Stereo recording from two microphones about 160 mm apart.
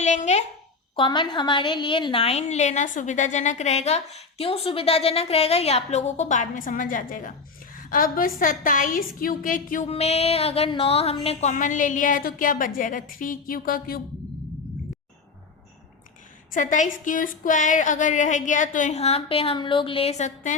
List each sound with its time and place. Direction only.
0.0 s a sound: 45° left (ahead or behind)
0.9 s a woman's voice: 30° left (ahead or behind); by 9.9 s 55° left (ahead or behind)
9.9 s a woman's voice: 40° left (ahead or behind); by 14.0 s 65° left (ahead or behind)
16.5 s a woman's voice: 55° left (ahead or behind)